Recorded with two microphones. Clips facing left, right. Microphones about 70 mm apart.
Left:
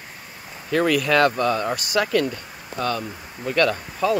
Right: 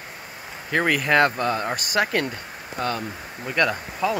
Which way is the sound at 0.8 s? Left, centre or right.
Right.